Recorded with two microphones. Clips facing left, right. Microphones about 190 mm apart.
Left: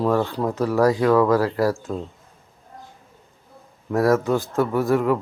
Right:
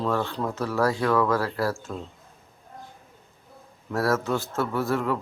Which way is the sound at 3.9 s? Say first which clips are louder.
Left 6 dB; 15° left (ahead or behind).